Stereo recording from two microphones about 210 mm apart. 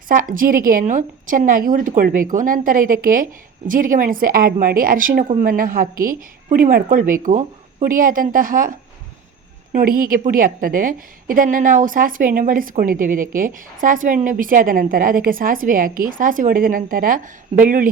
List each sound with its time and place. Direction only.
0.1 s a woman's voice: 40° right (ahead or behind)
9.7 s a woman's voice: 45° right (ahead or behind)